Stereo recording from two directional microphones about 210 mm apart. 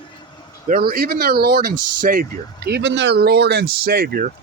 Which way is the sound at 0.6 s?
45° right (ahead or behind).